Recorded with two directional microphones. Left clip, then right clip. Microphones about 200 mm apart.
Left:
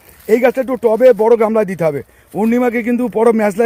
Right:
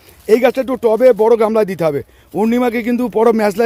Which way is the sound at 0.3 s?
10° right (ahead or behind).